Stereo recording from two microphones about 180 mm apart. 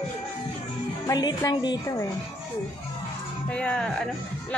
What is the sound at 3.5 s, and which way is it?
Speech, 5° left (ahead or behind).